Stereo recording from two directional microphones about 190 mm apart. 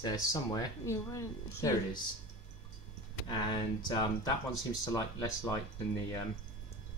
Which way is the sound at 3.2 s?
20° left (ahead or behind).